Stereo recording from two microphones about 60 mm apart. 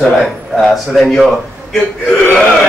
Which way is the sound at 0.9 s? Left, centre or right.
Centre.